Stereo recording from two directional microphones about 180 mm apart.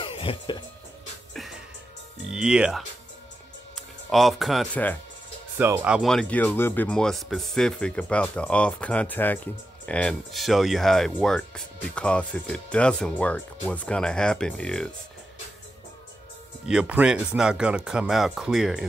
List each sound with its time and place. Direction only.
0.0 s music: 30° left (ahead or behind)
1.3 s music: centre (ahead or behind)
2.2 s speech: 5° right (ahead or behind)
4.1 s speech: centre (ahead or behind)
5.6 s speech: 10° right (ahead or behind); by 14.9 s 5° left (ahead or behind)
16.6 s speech: 5° right (ahead or behind)